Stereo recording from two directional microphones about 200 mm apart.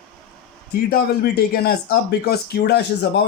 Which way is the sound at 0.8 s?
50° left (ahead or behind).